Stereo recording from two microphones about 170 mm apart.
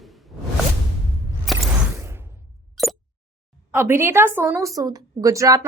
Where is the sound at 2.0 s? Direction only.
15° right (ahead or behind).